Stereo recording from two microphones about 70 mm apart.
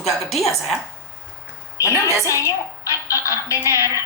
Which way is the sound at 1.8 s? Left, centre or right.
Left.